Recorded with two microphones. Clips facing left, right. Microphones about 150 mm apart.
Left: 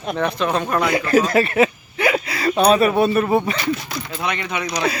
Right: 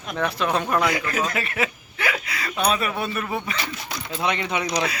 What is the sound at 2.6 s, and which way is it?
Speech, 30° left (ahead or behind).